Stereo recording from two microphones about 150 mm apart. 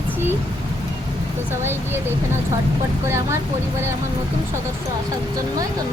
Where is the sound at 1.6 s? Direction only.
15° right (ahead or behind).